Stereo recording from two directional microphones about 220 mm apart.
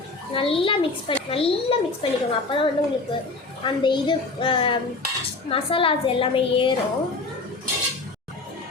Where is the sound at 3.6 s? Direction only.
20° left (ahead or behind).